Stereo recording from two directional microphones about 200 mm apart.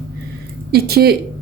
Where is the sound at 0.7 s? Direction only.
50° right (ahead or behind).